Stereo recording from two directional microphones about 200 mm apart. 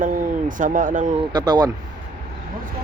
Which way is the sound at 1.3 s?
20° right (ahead or behind).